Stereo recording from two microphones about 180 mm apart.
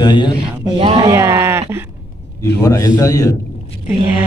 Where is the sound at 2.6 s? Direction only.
20° left (ahead or behind).